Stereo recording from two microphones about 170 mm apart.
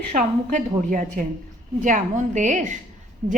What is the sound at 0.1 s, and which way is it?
A woman's voice, 50° right (ahead or behind).